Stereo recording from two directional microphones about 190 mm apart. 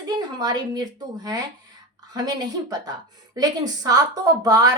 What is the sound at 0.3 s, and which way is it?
A woman's voice, 20° right (ahead or behind).